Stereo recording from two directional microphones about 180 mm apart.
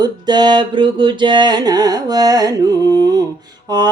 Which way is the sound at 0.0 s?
25° right (ahead or behind).